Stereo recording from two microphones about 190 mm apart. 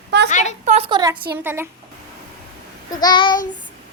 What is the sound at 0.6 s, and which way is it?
Speech, 35° right (ahead or behind).